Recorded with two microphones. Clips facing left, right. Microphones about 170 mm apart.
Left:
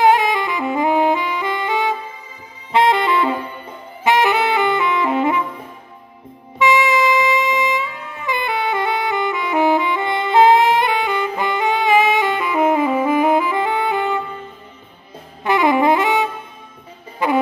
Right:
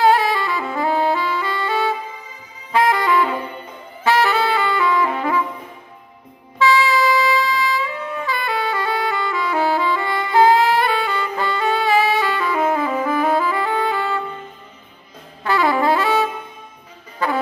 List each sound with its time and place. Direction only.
0.0 s saxophone: 20° left (ahead or behind)
6.6 s music: 20° left (ahead or behind)
15.4 s saxophone: 20° left (ahead or behind)
17.2 s music: 20° left (ahead or behind)